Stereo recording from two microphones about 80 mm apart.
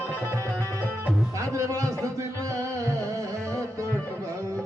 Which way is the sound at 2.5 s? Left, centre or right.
Right.